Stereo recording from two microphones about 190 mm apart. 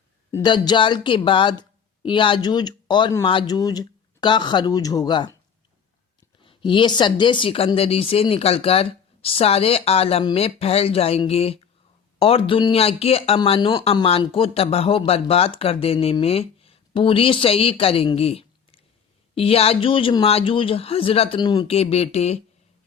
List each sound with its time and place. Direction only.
0.4 s speech: 25° left (ahead or behind)
6.4 s speech: 25° left (ahead or behind)